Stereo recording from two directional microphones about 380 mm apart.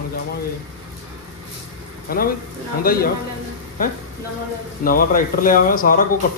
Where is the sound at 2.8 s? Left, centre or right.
Left.